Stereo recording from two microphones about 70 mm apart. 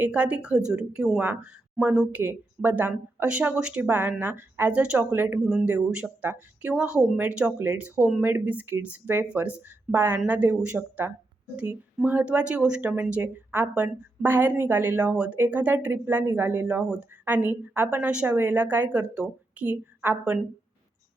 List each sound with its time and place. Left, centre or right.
0.0 s a woman's voice: centre
2.1 s a woman's voice: right
3.8 s a woman's voice: right
5.1 s speech: right
5.6 s a woman's voice: centre
6.7 s a woman's voice: centre
8.2 s a woman's voice: right